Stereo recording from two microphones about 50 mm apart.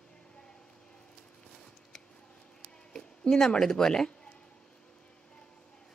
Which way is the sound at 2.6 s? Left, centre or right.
Centre.